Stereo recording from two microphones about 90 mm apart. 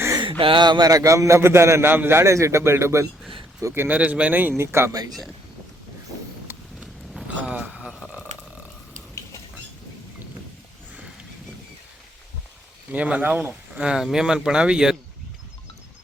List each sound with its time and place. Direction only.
0.2 s a man's voice: 75° right (ahead or behind); by 3.1 s 30° right (ahead or behind)
3.8 s a man's voice: 15° right (ahead or behind)
7.3 s speech: 15° right (ahead or behind)
7.9 s speech: centre (ahead or behind)
12.9 s speech: 15° right (ahead or behind)